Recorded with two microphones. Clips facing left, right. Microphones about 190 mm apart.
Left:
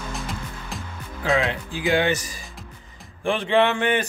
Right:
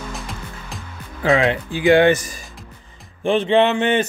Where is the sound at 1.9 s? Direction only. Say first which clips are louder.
Right 8 dB; 60° right (ahead or behind).